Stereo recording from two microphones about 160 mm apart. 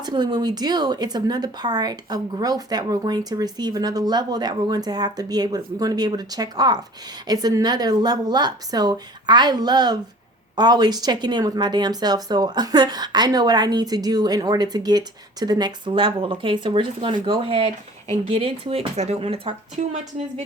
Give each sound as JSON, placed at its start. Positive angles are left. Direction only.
{"t": 0.0, "sound": "speech", "side_deg": -25}